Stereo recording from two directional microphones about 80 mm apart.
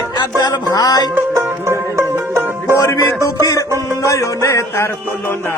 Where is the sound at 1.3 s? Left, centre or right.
Right.